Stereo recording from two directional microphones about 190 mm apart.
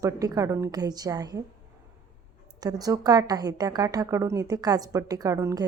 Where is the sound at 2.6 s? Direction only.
20° right (ahead or behind).